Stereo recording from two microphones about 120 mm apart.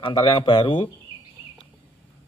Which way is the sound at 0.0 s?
45° left (ahead or behind).